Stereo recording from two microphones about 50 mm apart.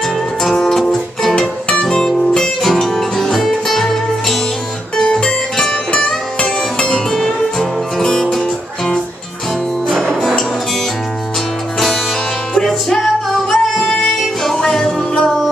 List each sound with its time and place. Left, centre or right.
0.4 s music: centre
1.7 s music: centre
5.9 s music: left
7.1 s music: centre
12.6 s music: centre